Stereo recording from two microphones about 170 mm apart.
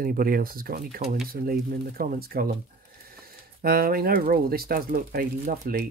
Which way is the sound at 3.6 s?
60° right (ahead or behind).